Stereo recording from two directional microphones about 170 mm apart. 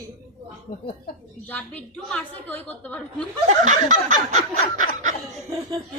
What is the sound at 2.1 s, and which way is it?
A woman's voice, 10° left (ahead or behind).